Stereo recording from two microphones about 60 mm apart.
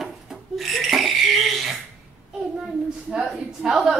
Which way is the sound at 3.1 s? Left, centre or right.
Centre.